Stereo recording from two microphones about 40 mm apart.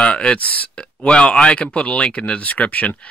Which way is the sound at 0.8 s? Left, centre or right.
Left.